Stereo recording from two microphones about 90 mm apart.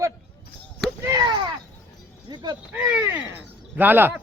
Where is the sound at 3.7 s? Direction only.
20° right (ahead or behind).